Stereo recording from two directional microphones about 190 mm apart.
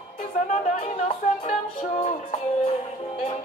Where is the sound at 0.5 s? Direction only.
40° left (ahead or behind).